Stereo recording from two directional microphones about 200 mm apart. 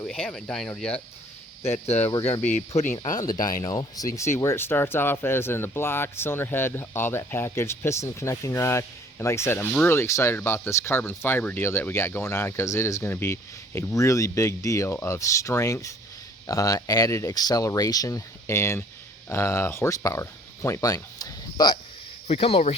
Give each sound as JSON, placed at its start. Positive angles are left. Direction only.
{"t": 0.0, "sound": "speech", "side_deg": 5}
{"t": 1.6, "sound": "speech", "side_deg": 30}
{"t": 3.4, "sound": "speech", "side_deg": 20}